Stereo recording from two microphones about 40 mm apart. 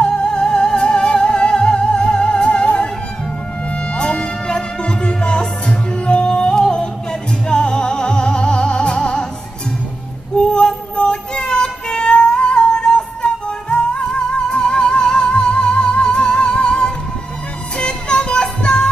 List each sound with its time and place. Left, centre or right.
0.0 s music: left
3.7 s music: left
10.3 s music: left